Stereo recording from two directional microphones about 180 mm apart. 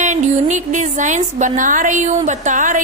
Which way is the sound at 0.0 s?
40° right (ahead or behind).